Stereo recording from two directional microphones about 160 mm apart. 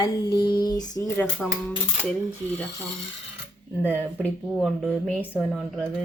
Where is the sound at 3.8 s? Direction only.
10° right (ahead or behind).